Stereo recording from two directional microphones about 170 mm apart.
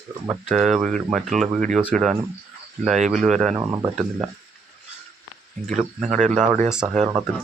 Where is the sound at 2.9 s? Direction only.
45° right (ahead or behind).